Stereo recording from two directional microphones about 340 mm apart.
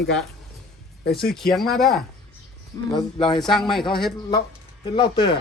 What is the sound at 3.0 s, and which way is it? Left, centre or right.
Speech, centre.